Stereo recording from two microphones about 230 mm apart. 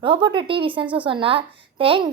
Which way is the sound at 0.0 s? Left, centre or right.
Right.